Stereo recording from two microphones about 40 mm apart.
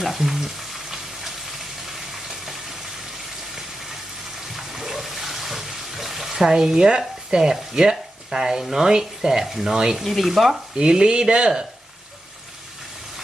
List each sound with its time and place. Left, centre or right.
0.0 s frying: centre
4.5 s a sound: centre
6.5 s speech: centre
10.0 s frying: centre
10.5 s speech: centre